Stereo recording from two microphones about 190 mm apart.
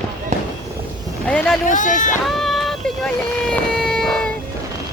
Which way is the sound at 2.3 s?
Centre (ahead or behind).